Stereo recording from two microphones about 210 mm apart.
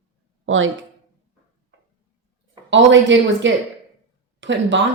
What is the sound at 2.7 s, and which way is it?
Speech, 60° right (ahead or behind).